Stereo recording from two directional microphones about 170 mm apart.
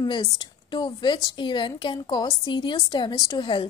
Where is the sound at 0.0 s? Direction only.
25° left (ahead or behind).